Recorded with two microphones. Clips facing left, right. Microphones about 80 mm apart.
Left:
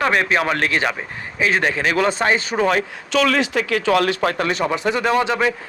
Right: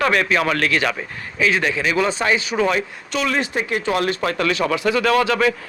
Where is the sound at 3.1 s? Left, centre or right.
Left.